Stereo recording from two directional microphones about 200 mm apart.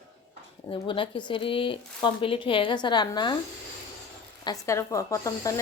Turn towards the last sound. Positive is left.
turn(degrees=15)  # may be behind; listen again after turning